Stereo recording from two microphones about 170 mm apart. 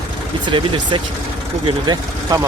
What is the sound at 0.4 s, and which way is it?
Speech, 30° right (ahead or behind).